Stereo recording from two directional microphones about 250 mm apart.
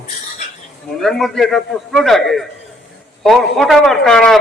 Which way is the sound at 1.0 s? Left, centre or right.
Centre.